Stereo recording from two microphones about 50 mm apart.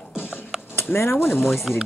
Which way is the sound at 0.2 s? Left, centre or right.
Left.